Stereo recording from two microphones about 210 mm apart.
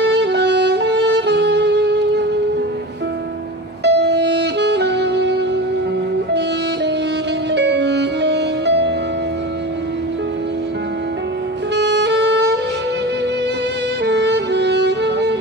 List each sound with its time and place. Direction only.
0.0 s music: 55° right (ahead or behind)
3.8 s music: 55° right (ahead or behind)
7.5 s music: 55° right (ahead or behind)
11.7 s saxophone: 55° right (ahead or behind)
14.0 s music: 55° right (ahead or behind)